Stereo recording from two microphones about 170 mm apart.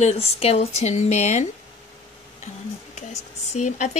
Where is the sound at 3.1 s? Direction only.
45° left (ahead or behind).